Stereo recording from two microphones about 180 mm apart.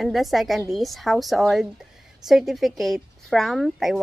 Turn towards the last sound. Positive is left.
turn(degrees=0)  # may be behind; listen again after turning